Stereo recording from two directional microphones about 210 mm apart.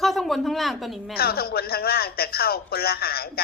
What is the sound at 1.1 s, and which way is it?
A man's voice, 45° left (ahead or behind).